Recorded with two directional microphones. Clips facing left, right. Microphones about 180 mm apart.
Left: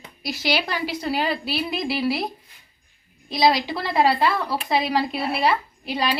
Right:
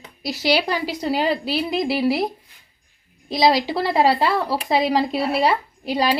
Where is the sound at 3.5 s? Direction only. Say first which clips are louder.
Right 3 dB; 35° right (ahead or behind).